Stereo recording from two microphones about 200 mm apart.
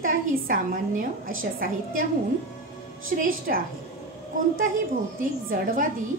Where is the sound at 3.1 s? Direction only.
45° right (ahead or behind).